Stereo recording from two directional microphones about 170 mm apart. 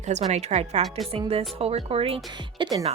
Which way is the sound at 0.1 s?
40° right (ahead or behind).